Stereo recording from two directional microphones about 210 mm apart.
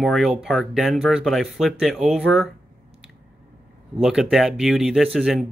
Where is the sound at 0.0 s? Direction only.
Centre (ahead or behind).